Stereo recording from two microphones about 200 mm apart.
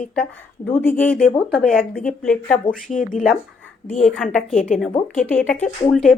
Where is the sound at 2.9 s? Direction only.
40° left (ahead or behind).